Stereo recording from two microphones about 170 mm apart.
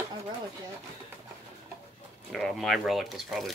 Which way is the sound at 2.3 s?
Centre (ahead or behind).